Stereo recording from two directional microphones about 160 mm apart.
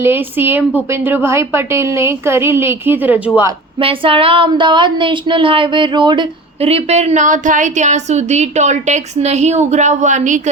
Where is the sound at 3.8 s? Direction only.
35° right (ahead or behind).